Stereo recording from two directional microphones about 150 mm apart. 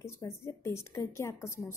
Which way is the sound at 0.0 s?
20° left (ahead or behind).